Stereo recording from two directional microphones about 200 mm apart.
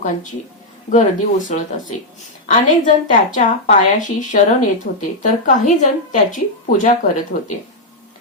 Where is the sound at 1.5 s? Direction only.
40° left (ahead or behind).